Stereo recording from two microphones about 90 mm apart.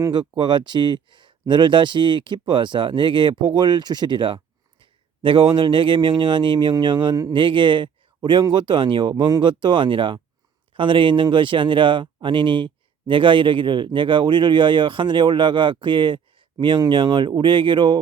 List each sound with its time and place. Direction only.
0.1 s a man's voice: 55° right (ahead or behind)